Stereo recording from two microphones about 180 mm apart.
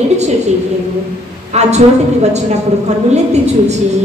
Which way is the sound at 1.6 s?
40° right (ahead or behind).